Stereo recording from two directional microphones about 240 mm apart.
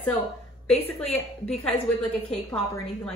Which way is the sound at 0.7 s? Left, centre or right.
Left.